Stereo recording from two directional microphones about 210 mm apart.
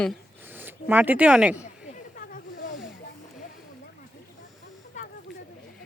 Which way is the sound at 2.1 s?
40° left (ahead or behind).